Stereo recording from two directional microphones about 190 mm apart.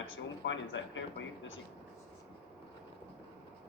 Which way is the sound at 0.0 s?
85° left.